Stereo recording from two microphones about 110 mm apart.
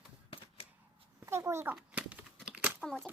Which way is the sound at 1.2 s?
25° right (ahead or behind).